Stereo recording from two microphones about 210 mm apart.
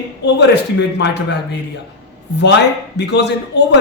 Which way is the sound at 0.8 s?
55° left (ahead or behind).